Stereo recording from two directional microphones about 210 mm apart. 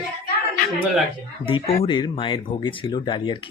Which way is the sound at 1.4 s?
25° left (ahead or behind).